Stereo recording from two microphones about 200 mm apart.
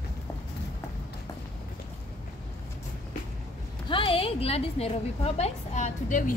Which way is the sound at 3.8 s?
25° left (ahead or behind).